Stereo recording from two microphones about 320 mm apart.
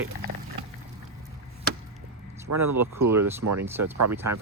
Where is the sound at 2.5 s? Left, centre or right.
Right.